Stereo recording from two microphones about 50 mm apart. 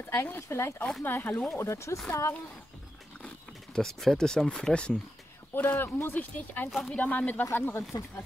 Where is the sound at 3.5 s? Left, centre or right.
Centre; by 4.9 s left.